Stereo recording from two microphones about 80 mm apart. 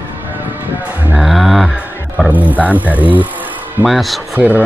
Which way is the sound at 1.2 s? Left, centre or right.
Centre.